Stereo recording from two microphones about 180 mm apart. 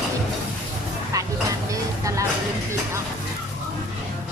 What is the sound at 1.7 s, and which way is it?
Vehicle, 15° right (ahead or behind).